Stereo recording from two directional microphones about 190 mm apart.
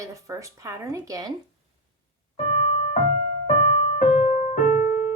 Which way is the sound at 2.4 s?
35° left (ahead or behind).